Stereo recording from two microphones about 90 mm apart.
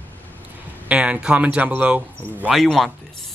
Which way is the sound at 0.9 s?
15° right (ahead or behind).